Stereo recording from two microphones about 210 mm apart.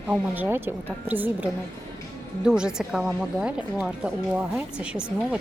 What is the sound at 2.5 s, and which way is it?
A woman's voice, 5° right (ahead or behind).